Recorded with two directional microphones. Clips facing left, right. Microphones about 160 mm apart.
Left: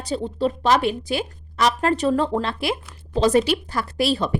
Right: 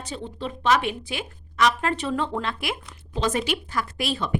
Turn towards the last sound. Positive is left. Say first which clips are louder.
# left 6 dB
turn(degrees=35)  # may be behind; listen again after turning